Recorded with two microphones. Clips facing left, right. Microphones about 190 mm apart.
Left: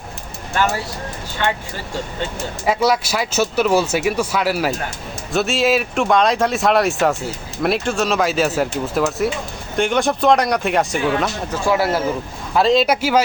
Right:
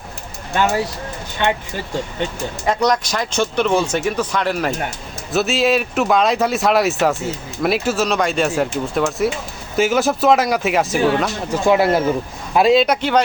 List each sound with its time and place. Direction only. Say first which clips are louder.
0.5 s speech: right 2 dB; 20° right (ahead or behind)
2.6 s speech: even; 5° left (ahead or behind)
11.6 s speech: right 3 dB; 20° right (ahead or behind)
12.7 s speech: right 1 dB; 5° left (ahead or behind)